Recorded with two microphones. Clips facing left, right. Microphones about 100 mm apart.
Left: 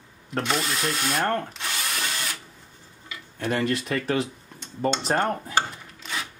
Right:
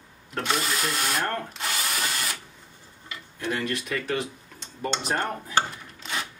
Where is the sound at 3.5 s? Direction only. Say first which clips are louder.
Left 4 dB; 35° left (ahead or behind).